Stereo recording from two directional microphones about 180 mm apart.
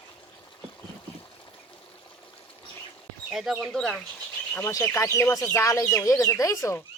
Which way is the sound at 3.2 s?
Centre (ahead or behind).